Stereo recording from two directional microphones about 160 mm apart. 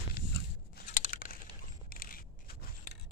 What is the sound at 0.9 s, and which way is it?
Crumpling, 55° left (ahead or behind).